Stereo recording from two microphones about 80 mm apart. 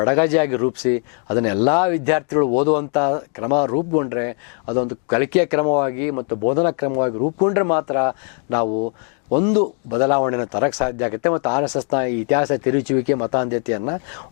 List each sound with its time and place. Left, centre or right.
0.0 s speech: centre